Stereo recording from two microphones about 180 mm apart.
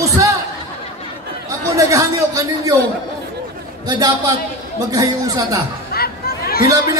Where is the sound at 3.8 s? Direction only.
20° right (ahead or behind).